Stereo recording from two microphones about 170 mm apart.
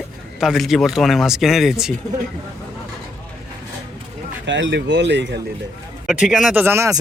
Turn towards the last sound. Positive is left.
turn(degrees=-15)  # may be behind; listen again after turning